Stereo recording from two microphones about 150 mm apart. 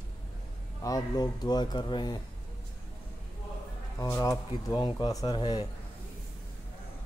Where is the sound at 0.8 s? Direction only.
25° left (ahead or behind).